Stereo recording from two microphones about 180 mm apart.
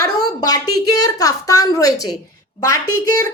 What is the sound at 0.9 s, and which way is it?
A woman's voice, 20° left (ahead or behind).